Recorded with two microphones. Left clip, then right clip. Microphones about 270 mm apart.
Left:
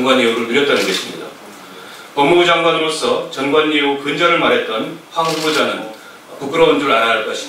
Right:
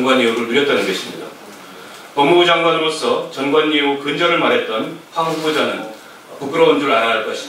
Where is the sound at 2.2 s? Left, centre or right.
Centre.